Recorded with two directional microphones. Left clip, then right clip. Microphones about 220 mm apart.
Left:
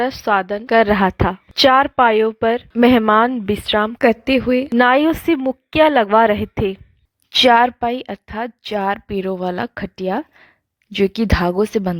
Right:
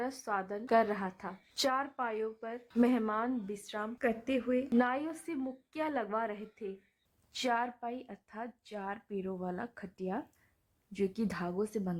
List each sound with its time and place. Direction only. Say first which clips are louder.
0.3 s a woman's voice: left 15 dB; 35° left (ahead or behind)